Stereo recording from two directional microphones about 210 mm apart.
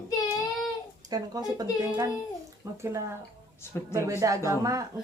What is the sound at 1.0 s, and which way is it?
Speech, 15° right (ahead or behind).